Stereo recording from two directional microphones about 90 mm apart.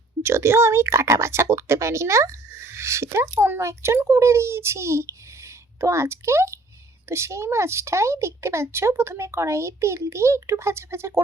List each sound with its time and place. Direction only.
0.2 s speech: 30° right (ahead or behind)